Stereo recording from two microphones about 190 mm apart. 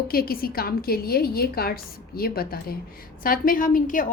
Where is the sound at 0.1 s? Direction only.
50° left (ahead or behind).